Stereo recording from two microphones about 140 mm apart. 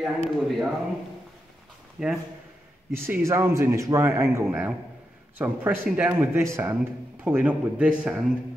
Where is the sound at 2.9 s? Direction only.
20° right (ahead or behind).